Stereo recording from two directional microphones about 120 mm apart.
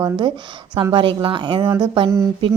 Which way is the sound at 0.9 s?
45° right (ahead or behind).